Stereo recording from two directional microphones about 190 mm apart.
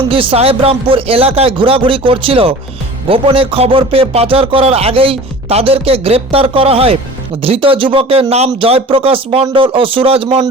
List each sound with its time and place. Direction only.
0.1 s speech: 30° right (ahead or behind)